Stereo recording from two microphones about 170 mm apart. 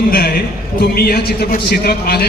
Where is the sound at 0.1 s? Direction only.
60° left (ahead or behind).